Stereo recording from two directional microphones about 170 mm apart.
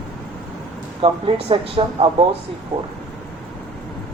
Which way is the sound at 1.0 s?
30° right (ahead or behind).